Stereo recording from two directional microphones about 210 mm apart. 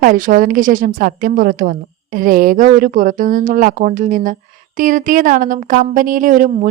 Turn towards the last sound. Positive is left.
turn(degrees=-40)  # may be behind; listen again after turning